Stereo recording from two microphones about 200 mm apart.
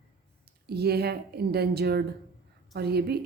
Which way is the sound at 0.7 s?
55° right (ahead or behind).